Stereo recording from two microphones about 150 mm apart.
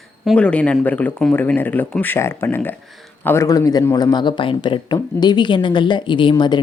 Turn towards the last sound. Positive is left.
turn(degrees=30)  # may be behind; listen again after turning